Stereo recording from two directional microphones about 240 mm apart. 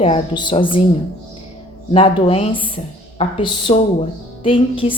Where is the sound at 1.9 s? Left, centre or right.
Left.